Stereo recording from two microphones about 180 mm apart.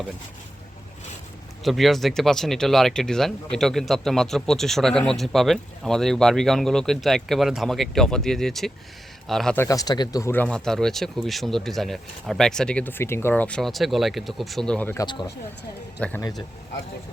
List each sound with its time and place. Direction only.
1.6 s speech: centre (ahead or behind)
9.6 s speech: 20° left (ahead or behind)
15.0 s speech: 25° left (ahead or behind)
16.0 s speech: 5° left (ahead or behind)